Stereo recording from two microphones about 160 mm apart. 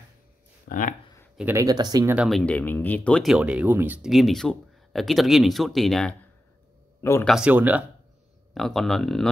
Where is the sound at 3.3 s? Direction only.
5° right (ahead or behind).